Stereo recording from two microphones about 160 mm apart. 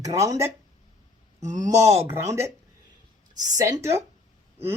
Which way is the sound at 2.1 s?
15° right (ahead or behind).